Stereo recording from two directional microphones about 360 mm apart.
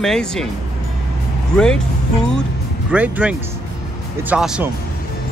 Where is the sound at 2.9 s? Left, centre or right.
Centre.